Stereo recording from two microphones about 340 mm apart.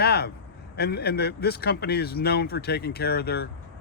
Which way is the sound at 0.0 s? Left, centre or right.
Left.